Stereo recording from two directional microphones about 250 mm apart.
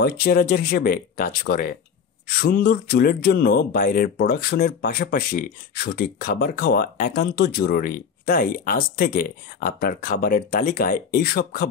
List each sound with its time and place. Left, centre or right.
0.0 s speech: left